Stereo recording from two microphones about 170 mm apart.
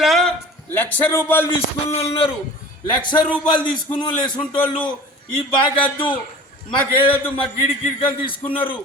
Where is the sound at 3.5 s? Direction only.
30° left (ahead or behind).